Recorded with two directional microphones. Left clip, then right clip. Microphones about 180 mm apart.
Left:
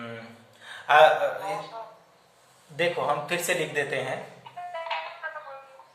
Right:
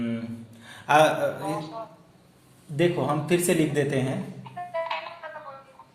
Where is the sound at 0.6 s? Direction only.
45° right (ahead or behind).